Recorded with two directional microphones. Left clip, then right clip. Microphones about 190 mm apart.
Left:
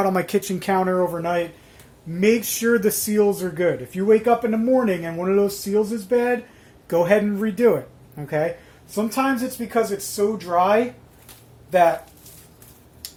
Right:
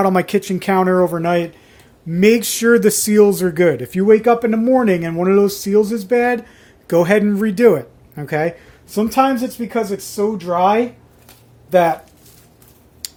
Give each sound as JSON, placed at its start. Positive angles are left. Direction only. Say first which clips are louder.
{"t": 0.0, "sound": "speech", "louder": "right 5 dB", "side_deg": -35}